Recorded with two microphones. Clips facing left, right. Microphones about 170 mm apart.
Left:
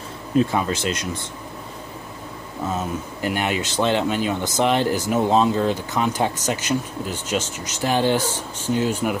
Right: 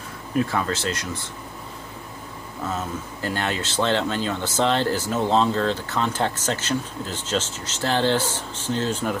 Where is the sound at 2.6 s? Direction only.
15° left (ahead or behind).